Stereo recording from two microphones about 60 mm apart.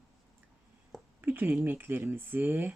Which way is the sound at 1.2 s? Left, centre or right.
Right.